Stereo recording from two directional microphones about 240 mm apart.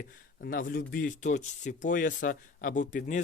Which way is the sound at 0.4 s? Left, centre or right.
Left.